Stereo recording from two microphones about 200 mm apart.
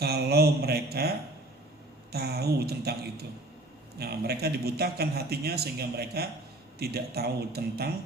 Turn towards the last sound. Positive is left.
turn(degrees=-50)  # may be behind; listen again after turning